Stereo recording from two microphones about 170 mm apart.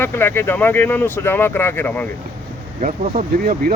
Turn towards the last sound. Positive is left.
turn(degrees=-50)  # may be behind; listen again after turning